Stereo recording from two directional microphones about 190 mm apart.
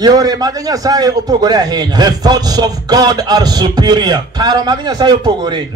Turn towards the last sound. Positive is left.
turn(degrees=-20)  # may be behind; listen again after turning